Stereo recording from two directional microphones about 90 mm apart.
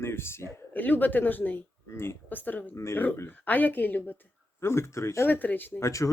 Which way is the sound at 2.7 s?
35° left (ahead or behind).